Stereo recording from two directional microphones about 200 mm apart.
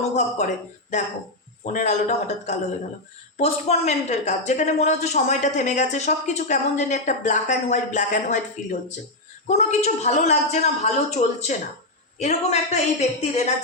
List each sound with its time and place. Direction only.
0.2 s speech: 35° left (ahead or behind)